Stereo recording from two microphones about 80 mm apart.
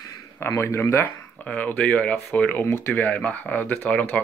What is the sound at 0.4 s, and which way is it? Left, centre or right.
Speech, left.